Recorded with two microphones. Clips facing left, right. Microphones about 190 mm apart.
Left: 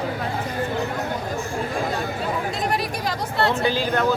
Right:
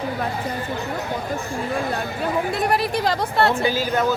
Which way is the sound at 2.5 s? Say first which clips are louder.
Right 4 dB; 65° right (ahead or behind).